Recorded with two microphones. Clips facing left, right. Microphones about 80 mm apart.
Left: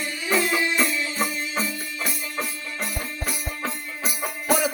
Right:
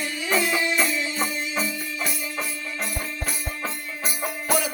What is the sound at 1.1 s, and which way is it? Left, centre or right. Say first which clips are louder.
Music: even; centre.